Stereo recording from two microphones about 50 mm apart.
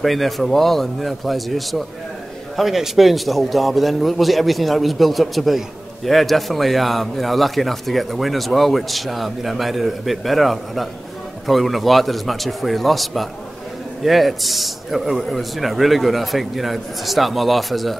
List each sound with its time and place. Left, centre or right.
0.0 s a man's voice: centre